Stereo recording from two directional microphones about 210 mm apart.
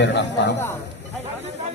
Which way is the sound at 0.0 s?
55° left (ahead or behind).